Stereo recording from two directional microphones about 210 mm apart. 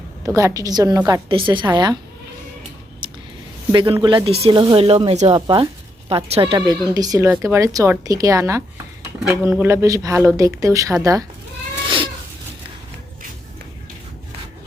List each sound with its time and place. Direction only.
0.3 s speech: 15° right (ahead or behind)
3.0 s a sound: 20° right (ahead or behind)
3.7 s speech: 25° right (ahead or behind)